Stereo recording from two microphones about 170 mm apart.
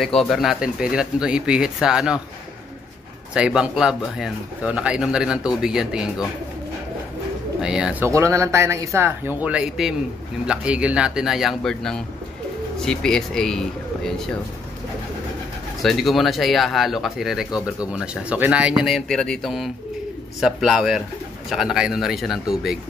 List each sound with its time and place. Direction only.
0.0 s speech: centre (ahead or behind)
3.3 s speech: 5° right (ahead or behind)
7.6 s speech: 5° right (ahead or behind)
15.8 s speech: centre (ahead or behind)
17.5 s speech: 25° left (ahead or behind)
17.9 s speech: 5° right (ahead or behind)